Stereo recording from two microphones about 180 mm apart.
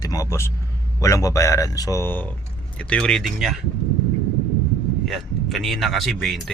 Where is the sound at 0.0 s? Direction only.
20° left (ahead or behind); by 3.6 s centre (ahead or behind).